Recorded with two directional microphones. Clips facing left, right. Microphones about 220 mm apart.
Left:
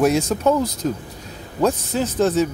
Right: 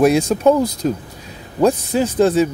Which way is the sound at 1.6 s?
10° right (ahead or behind).